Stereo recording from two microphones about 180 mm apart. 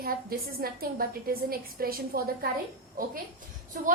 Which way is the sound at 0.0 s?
55° right (ahead or behind).